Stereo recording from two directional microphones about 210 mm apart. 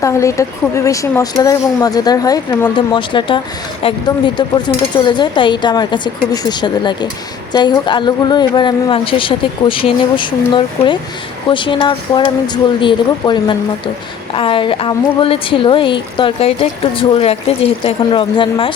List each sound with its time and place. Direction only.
0.0 s a woman's voice: 15° left (ahead or behind)